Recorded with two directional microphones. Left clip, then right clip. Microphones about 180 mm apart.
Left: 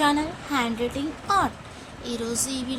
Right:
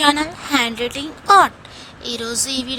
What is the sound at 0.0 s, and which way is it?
A woman's voice, 60° right (ahead or behind).